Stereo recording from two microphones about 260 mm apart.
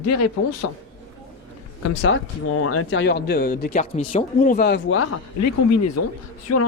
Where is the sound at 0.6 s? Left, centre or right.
Left.